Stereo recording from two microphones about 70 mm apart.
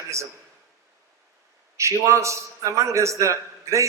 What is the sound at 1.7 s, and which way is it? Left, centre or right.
A man's voice, right.